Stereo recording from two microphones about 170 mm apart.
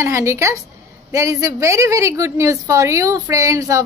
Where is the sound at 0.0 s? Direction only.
15° right (ahead or behind).